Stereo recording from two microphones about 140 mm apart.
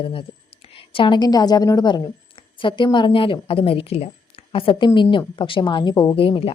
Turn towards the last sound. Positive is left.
turn(degrees=40)  # may be behind; listen again after turning